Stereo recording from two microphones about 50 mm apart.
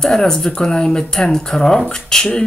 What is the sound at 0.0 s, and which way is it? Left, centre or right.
Speech, centre.